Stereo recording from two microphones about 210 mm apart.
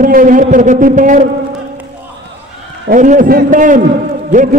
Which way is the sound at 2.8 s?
40° right (ahead or behind).